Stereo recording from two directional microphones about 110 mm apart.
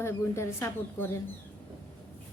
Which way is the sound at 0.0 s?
25° left (ahead or behind).